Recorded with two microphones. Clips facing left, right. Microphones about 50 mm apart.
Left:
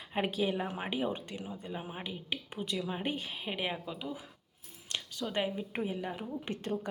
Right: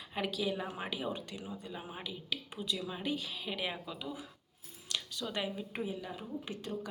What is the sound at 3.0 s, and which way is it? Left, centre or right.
A woman's voice, left.